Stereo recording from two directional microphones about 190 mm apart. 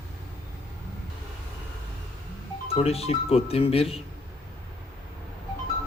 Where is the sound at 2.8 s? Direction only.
30° left (ahead or behind).